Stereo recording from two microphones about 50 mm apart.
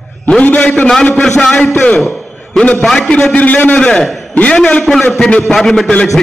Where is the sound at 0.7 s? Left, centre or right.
Centre.